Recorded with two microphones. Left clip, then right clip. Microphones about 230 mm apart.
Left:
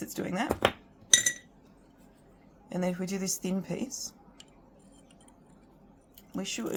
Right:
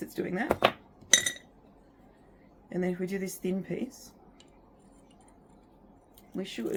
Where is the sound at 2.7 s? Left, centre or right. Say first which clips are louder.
Right 1 dB; left.